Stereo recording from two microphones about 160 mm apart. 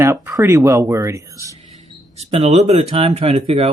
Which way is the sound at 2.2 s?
40° right (ahead or behind).